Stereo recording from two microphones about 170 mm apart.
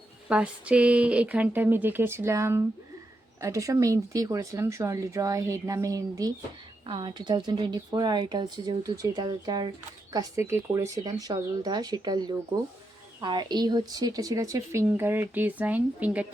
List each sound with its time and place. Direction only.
0.3 s speech: 5° right (ahead or behind)